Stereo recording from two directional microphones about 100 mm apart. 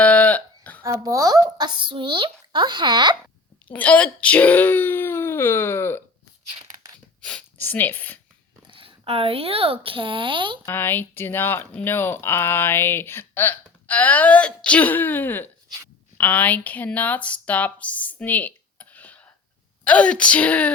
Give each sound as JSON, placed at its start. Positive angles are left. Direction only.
{"t": 0.0, "sound": "a sound", "side_deg": 15}
{"t": 0.8, "sound": "speech", "side_deg": -35}
{"t": 3.7, "sound": "speech", "side_deg": 15}
{"t": 7.2, "sound": "a sound", "side_deg": 10}
{"t": 7.6, "sound": "speech", "side_deg": 20}
{"t": 8.6, "sound": "speech", "side_deg": -60}
{"t": 10.7, "sound": "a woman's voice", "side_deg": 20}